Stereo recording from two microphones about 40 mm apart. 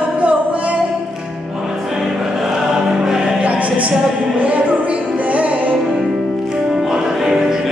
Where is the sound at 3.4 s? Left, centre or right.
Right.